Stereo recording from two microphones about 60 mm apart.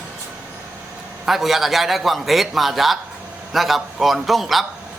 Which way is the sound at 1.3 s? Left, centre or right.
Centre.